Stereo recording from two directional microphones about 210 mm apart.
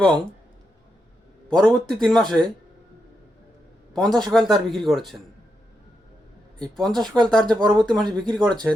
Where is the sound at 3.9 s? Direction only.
Centre (ahead or behind).